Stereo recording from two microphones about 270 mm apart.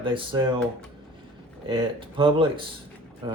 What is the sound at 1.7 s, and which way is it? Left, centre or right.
Speech, centre.